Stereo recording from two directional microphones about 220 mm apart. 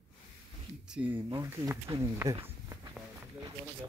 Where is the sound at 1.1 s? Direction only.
25° right (ahead or behind).